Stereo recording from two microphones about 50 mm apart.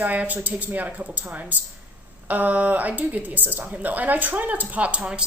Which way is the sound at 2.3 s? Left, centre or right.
Right.